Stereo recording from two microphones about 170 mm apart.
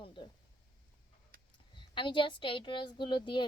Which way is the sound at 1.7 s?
30° left (ahead or behind).